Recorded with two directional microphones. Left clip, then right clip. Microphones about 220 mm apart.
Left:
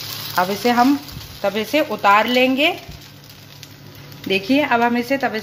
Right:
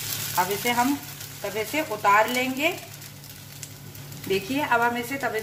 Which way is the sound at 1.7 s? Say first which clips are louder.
Left 6 dB; 40° left (ahead or behind).